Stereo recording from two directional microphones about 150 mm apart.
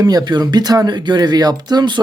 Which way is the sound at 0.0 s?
25° right (ahead or behind).